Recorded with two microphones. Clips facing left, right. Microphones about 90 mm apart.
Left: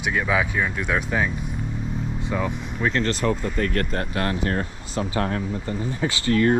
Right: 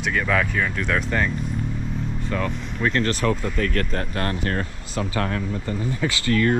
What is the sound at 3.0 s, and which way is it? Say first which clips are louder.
Speech: right 1 dB; 60° right (ahead or behind).